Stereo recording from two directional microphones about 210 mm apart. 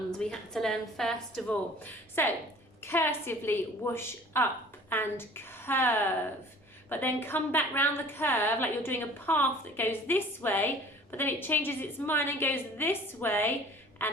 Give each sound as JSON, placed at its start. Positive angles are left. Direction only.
{"t": 0.2, "sound": "a woman's voice", "side_deg": 5}
{"t": 14.0, "sound": "quack", "side_deg": 10}